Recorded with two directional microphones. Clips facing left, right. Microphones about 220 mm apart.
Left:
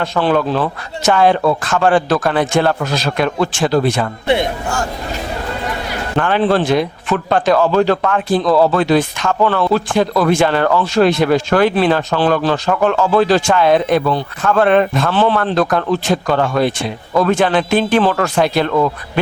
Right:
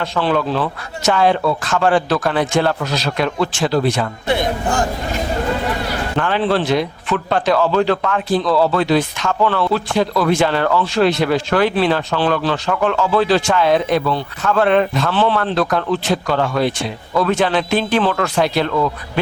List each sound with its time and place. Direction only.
0.0 s a man's voice: 45° left (ahead or behind)
6.1 s a man's voice: 50° left (ahead or behind)